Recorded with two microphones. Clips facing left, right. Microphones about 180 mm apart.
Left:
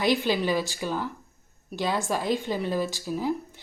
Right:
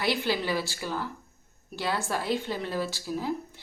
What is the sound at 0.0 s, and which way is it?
Speech, 15° left (ahead or behind).